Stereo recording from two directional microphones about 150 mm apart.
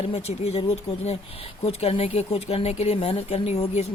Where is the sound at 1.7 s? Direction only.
40° left (ahead or behind).